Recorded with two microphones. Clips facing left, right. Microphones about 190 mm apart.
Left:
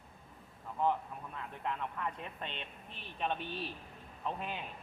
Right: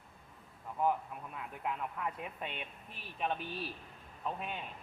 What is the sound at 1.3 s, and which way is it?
A man's voice, 10° right (ahead or behind).